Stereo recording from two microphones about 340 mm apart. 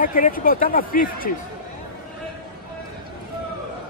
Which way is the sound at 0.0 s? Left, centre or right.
Left.